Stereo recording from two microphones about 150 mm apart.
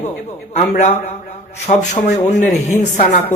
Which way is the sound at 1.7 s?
50° left (ahead or behind).